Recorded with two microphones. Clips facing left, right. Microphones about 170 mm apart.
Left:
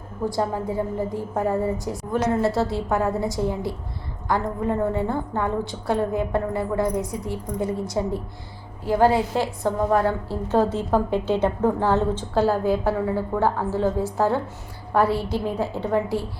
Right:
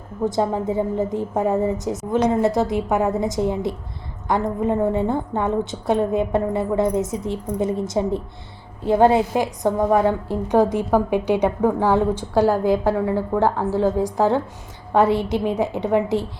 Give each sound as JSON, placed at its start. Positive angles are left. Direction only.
{"t": 0.3, "sound": "a woman's voice", "side_deg": -20}